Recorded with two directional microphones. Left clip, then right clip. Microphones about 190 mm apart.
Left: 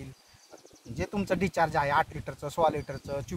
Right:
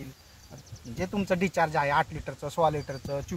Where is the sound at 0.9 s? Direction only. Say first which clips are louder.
Right 1 dB; 15° left (ahead or behind).